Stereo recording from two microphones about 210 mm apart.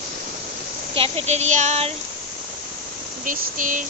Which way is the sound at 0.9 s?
25° right (ahead or behind).